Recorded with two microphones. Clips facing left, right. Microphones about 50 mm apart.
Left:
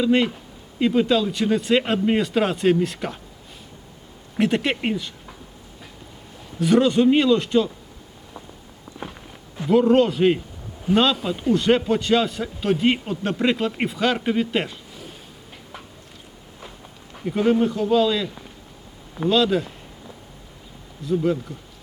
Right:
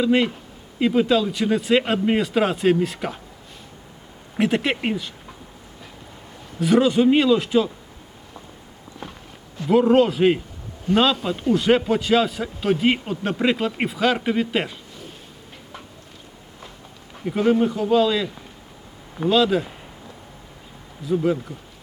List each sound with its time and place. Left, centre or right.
0.0 s a man's voice: centre
4.4 s a man's voice: centre
6.6 s a man's voice: centre
9.0 s walk: left
9.6 s a man's voice: centre
17.2 s a man's voice: centre
21.0 s a man's voice: centre